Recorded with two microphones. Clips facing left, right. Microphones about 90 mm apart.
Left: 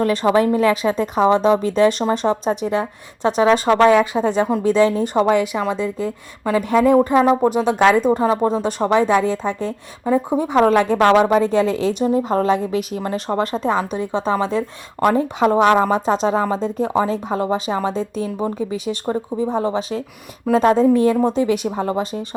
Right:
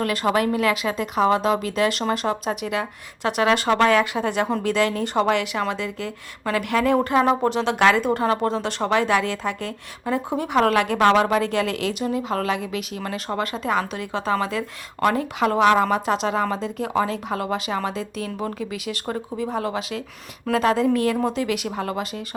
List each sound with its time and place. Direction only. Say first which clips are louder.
0.0 s speech: left 5 dB; 25° left (ahead or behind)
0.5 s speech: left 5 dB; 35° left (ahead or behind)
1.2 s speech: left 5 dB; 25° left (ahead or behind)
10.9 s speech: left 2 dB; 10° left (ahead or behind)
11.2 s speech: left 5 dB; 25° left (ahead or behind)
13.7 s speech: left 4 dB; 20° left (ahead or behind)